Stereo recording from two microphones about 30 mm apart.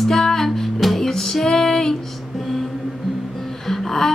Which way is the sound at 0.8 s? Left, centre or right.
Centre.